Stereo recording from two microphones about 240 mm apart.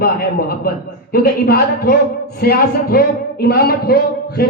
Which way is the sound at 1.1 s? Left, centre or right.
Left.